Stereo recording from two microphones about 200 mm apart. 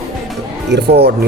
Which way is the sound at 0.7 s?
55° right (ahead or behind).